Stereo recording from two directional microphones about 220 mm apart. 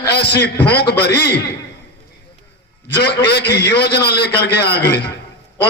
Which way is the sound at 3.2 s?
50° left (ahead or behind).